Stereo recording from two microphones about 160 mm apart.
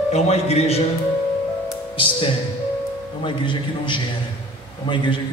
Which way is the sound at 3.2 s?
30° left (ahead or behind).